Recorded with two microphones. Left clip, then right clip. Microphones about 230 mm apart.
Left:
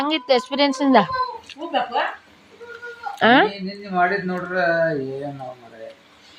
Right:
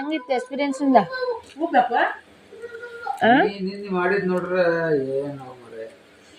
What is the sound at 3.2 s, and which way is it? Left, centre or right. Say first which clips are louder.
Speech: left 2 dB; centre.